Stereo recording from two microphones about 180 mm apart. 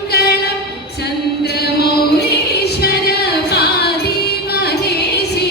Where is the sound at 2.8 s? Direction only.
60° left (ahead or behind).